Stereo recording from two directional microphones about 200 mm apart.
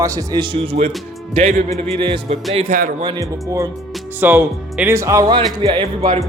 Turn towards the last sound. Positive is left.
turn(degrees=-25)  # may be behind; listen again after turning